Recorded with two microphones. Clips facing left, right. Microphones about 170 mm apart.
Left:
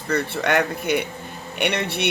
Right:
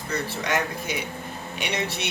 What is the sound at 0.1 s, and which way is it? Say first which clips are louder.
Speech: left 6 dB; 60° left (ahead or behind).